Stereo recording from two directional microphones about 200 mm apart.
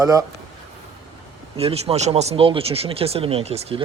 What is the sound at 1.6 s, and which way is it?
Speech, 30° right (ahead or behind).